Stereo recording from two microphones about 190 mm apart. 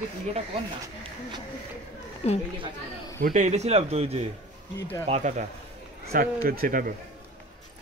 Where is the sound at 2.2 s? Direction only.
35° left (ahead or behind).